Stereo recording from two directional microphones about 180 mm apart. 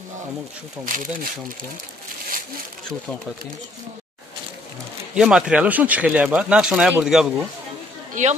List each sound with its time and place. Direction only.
0.8 s speech: 50° right (ahead or behind)
5.1 s speech: 5° right (ahead or behind)
8.1 s a woman's voice: 40° right (ahead or behind)